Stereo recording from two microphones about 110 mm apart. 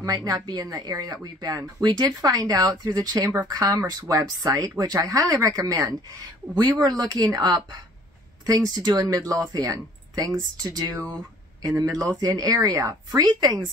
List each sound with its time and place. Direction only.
0.0 s speech: 30° right (ahead or behind)